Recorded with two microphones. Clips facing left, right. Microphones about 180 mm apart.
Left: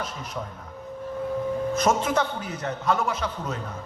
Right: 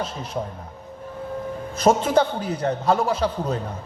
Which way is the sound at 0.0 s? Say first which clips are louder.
Right 5 dB; 30° right (ahead or behind).